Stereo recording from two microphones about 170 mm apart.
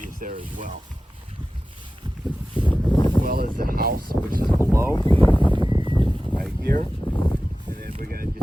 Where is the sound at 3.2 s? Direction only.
60° right (ahead or behind).